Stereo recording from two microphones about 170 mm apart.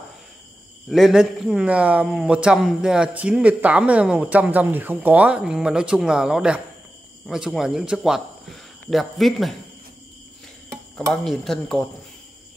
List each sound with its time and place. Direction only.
0.8 s a man's voice: centre (ahead or behind)
11.2 s a man's voice: centre (ahead or behind)